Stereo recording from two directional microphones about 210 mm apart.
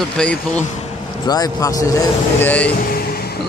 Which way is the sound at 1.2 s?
20° left (ahead or behind).